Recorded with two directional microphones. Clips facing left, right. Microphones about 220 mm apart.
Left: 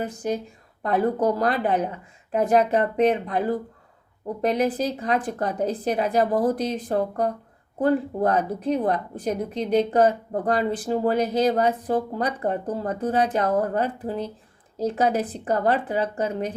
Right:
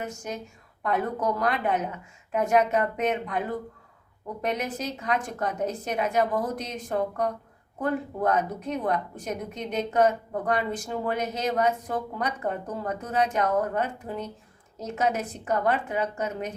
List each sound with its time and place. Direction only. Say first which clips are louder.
0.0 s speech: left 7 dB; 35° left (ahead or behind)